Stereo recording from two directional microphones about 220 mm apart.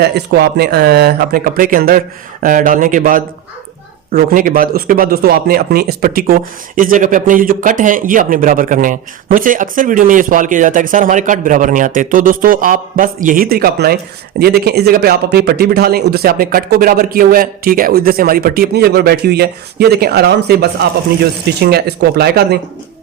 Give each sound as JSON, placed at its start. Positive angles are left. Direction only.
{"t": 0.0, "sound": "speech", "side_deg": -45}